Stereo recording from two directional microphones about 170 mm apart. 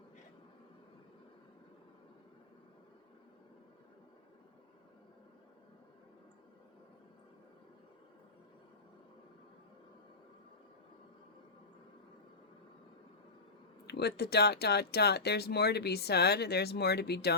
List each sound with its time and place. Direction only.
13.8 s speech: 75° left (ahead or behind)